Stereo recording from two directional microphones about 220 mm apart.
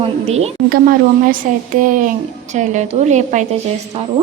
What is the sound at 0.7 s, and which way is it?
A woman's voice, 40° right (ahead or behind).